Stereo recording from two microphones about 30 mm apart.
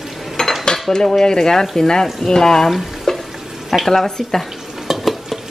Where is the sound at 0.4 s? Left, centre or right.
Left.